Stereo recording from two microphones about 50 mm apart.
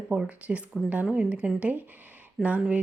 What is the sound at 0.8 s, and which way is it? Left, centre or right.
Speech, centre.